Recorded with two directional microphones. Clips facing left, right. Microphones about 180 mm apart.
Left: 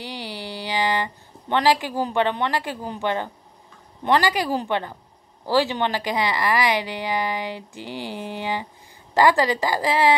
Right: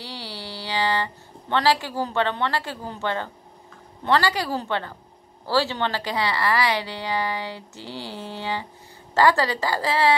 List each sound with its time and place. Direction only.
0.0 s a woman's voice: 15° left (ahead or behind)